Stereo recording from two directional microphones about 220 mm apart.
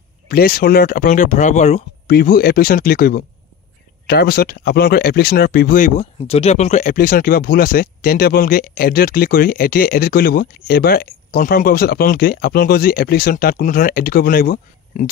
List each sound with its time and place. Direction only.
0.3 s speech: 40° left (ahead or behind)
2.0 s speech: 40° left (ahead or behind)